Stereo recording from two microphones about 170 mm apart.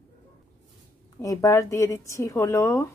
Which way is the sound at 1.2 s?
20° left (ahead or behind).